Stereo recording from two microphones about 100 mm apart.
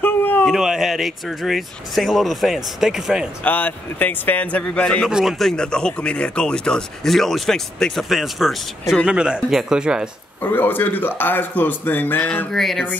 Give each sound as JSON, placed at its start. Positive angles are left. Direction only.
{"t": 0.0, "sound": "a sound", "side_deg": 20}
{"t": 0.5, "sound": "speech", "side_deg": -5}
{"t": 3.4, "sound": "a man's voice", "side_deg": 15}
{"t": 5.0, "sound": "speech", "side_deg": 0}
{"t": 10.4, "sound": "speech", "side_deg": 20}
{"t": 12.4, "sound": "speech", "side_deg": 5}